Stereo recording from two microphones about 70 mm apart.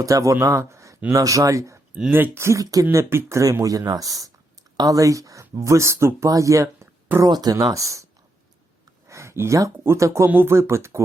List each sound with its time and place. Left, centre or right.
0.0 s speech: right
2.0 s speech: right
2.9 s speech: right
3.6 s speech: right
6.2 s speech: right
7.3 s speech: right
9.0 s a sound: right
9.8 s speech: right
10.2 s speech: right